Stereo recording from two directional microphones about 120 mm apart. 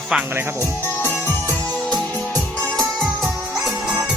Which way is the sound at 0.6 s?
15° left (ahead or behind).